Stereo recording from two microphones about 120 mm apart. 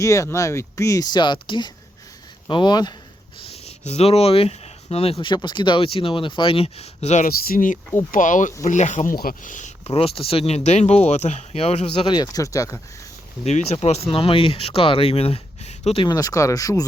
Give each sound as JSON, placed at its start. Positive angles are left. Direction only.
{"t": 0.0, "sound": "speech", "side_deg": 25}
{"t": 3.4, "sound": "speech", "side_deg": 60}
{"t": 5.2, "sound": "speech", "side_deg": 40}
{"t": 7.9, "sound": "speech", "side_deg": 90}
{"t": 12.0, "sound": "speech", "side_deg": 35}
{"t": 13.4, "sound": "speech", "side_deg": 60}
{"t": 16.0, "sound": "speech", "side_deg": 30}